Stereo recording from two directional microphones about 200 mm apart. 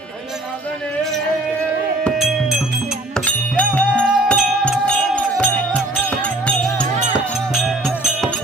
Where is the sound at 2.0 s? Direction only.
Centre (ahead or behind).